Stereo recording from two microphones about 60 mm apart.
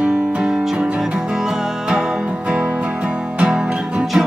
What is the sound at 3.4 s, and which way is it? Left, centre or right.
Music, centre.